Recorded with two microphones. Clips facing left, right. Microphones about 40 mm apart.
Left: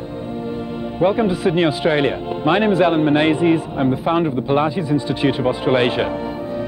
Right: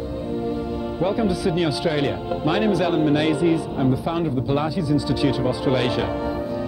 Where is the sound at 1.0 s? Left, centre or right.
Left.